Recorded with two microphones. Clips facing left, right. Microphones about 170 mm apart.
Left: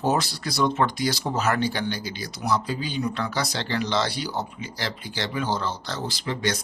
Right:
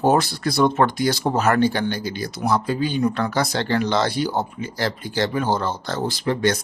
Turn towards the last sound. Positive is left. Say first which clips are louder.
# right 7 dB
turn(degrees=-50)  # may be behind; listen again after turning